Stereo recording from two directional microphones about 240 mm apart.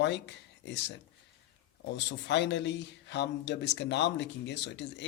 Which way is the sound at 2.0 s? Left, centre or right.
Left.